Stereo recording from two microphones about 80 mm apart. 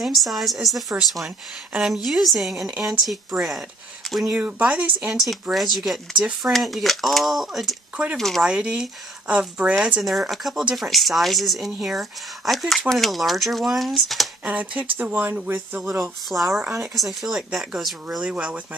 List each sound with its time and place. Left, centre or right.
0.0 s speech: centre
4.4 s speech: centre
5.2 s speech: centre
8.5 s speech: centre
10.0 s speech: centre
14.4 s speech: centre
15.8 s speech: centre
18.2 s speech: centre